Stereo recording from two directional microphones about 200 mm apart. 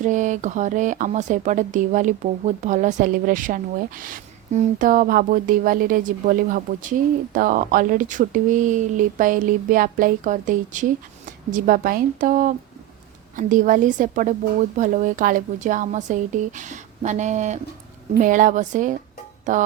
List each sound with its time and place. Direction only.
0.0 s speech: 40° right (ahead or behind)